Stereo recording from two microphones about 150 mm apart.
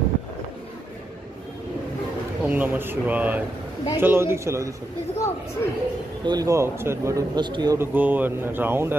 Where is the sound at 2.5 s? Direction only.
10° right (ahead or behind).